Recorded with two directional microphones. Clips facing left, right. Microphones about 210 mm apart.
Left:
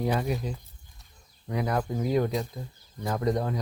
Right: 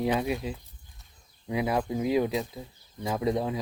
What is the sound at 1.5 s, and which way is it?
Speech, 10° right (ahead or behind).